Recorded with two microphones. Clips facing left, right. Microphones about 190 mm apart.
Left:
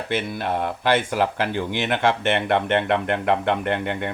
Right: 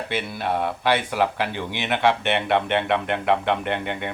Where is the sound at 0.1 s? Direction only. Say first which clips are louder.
Left 2 dB; 45° left (ahead or behind).